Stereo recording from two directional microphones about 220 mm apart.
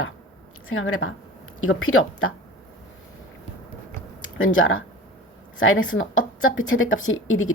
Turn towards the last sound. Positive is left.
turn(degrees=65)  # may be behind; listen again after turning